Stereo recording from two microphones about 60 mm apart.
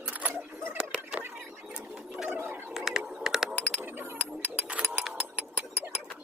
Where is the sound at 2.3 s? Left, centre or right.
Right.